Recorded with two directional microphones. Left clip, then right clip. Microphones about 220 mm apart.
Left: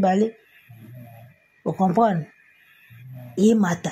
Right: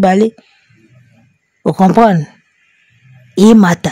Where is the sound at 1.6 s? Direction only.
50° right (ahead or behind).